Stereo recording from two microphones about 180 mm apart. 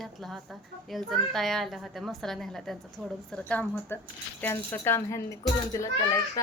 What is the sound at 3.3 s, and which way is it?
Speech, 5° left (ahead or behind).